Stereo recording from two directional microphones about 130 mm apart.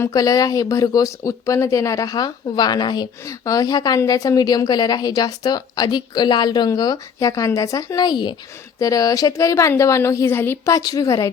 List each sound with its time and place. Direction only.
0.0 s speech: 25° left (ahead or behind)